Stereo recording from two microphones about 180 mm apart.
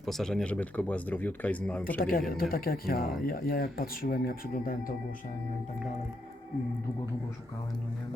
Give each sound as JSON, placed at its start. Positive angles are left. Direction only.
{"t": 0.0, "sound": "speech", "side_deg": 0}
{"t": 2.0, "sound": "speech", "side_deg": 55}